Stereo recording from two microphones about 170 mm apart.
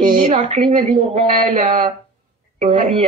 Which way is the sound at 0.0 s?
30° right (ahead or behind).